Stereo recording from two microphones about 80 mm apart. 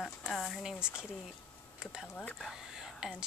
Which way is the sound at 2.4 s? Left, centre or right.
Centre.